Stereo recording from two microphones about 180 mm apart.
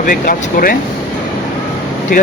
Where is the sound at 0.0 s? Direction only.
50° left (ahead or behind).